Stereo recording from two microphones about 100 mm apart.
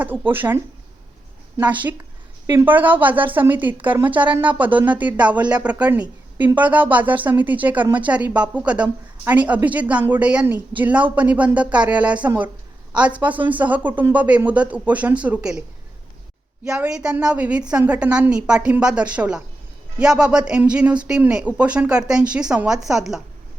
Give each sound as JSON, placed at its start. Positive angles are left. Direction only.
{"t": 0.3, "sound": "speech", "side_deg": -20}
{"t": 1.6, "sound": "speech", "side_deg": -15}
{"t": 16.6, "sound": "speech", "side_deg": -5}